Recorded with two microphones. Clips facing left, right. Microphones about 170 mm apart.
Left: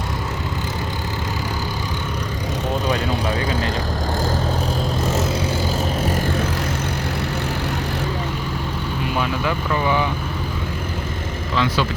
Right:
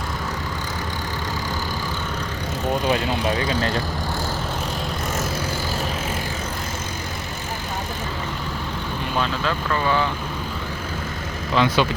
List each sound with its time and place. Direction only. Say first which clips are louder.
9.1 s speech: even; 15° left (ahead or behind)
11.5 s speech: right 2 dB; 20° right (ahead or behind)